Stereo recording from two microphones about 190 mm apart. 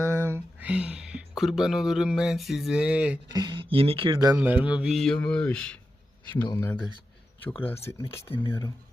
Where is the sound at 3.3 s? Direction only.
20° right (ahead or behind).